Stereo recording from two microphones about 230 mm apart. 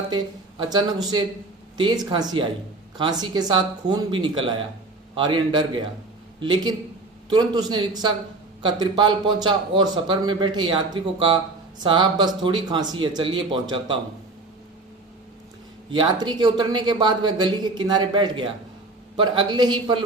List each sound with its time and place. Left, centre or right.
0.1 s speech: centre
15.9 s speech: centre